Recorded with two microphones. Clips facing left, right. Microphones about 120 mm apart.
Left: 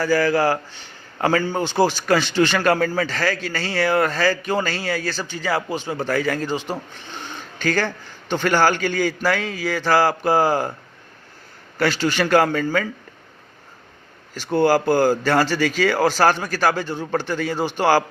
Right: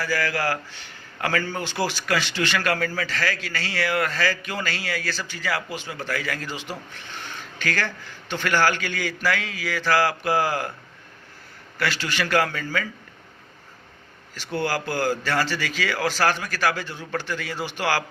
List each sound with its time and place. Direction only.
0.0 s speech: 30° left (ahead or behind)
11.8 s speech: 35° left (ahead or behind)
14.3 s speech: 45° left (ahead or behind)